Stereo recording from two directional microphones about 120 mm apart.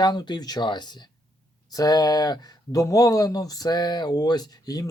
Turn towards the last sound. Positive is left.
turn(degrees=35)  # may be behind; listen again after turning